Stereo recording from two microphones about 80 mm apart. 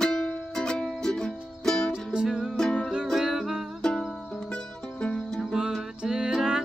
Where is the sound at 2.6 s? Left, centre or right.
Centre.